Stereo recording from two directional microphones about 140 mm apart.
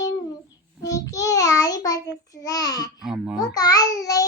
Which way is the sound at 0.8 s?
25° left (ahead or behind).